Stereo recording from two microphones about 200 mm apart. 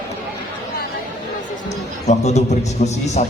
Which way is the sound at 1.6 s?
35° left (ahead or behind).